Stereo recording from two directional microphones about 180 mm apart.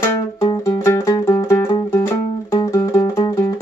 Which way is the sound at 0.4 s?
15° left (ahead or behind).